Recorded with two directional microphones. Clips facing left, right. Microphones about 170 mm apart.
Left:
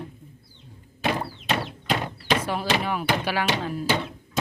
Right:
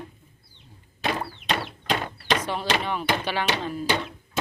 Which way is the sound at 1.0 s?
5° left (ahead or behind).